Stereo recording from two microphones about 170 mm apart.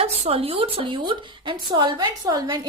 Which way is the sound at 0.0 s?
35° right (ahead or behind).